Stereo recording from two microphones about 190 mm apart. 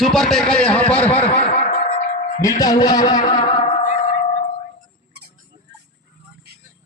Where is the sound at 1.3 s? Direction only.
45° left (ahead or behind).